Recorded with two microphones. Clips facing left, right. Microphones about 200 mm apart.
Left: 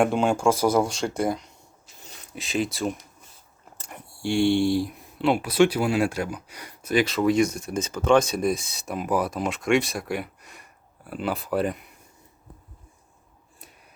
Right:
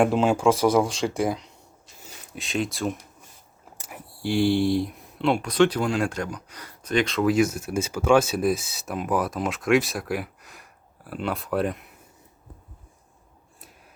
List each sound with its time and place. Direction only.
0.0 s speech: 5° right (ahead or behind)